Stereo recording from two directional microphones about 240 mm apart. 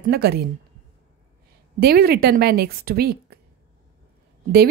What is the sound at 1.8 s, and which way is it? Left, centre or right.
Speech, right.